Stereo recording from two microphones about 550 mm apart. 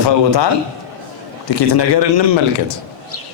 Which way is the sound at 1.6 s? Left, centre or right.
Left.